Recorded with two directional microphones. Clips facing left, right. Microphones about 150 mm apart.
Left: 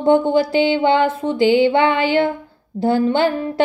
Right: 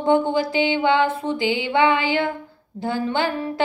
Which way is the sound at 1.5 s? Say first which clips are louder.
Left 3 dB; 50° left (ahead or behind).